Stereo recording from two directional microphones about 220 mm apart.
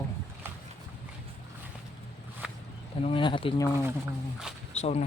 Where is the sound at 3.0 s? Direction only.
20° left (ahead or behind).